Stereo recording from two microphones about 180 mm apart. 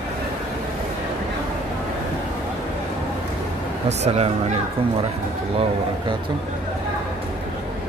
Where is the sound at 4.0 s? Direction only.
35° right (ahead or behind).